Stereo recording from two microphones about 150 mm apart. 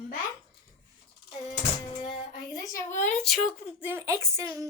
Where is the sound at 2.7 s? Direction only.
60° left (ahead or behind).